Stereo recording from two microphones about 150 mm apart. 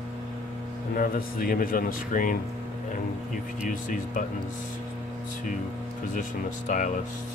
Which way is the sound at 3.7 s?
60° left (ahead or behind).